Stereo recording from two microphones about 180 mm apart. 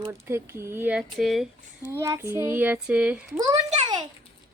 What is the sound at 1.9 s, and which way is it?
Speech, 15° right (ahead or behind).